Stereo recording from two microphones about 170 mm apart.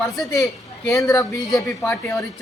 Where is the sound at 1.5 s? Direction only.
Centre (ahead or behind).